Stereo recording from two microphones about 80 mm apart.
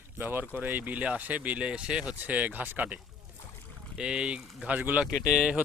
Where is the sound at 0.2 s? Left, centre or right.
Right; by 5.6 s centre.